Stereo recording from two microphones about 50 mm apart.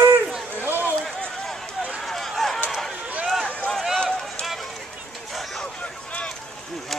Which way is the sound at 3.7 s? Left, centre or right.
Centre.